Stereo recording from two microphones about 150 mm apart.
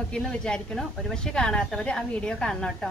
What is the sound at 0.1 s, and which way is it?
A woman's voice, 5° left (ahead or behind).